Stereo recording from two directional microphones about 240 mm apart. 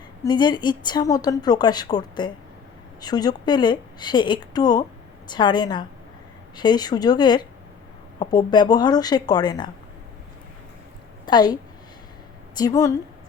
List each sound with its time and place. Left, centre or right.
0.3 s a woman's voice: centre
11.3 s a woman's voice: centre
12.5 s a woman's voice: centre